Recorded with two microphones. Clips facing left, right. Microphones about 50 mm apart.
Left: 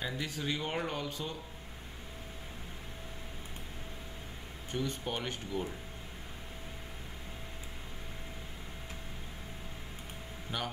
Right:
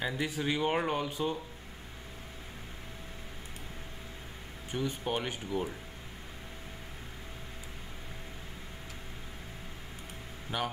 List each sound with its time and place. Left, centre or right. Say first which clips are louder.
0.0 s speech: right 4 dB; centre
4.6 s speech: right 2 dB; centre
10.5 s speech: right 4 dB; centre